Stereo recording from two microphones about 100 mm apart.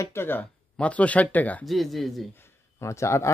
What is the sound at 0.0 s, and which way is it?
Speech, 25° left (ahead or behind).